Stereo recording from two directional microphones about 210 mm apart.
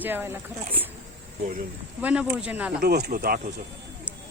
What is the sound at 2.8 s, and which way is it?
Speech, 45° right (ahead or behind).